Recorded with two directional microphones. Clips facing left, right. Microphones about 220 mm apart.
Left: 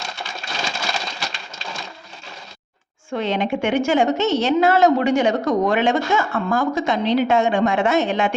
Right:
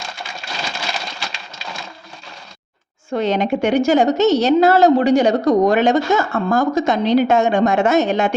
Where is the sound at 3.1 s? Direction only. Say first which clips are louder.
Right 4 dB; 40° right (ahead or behind).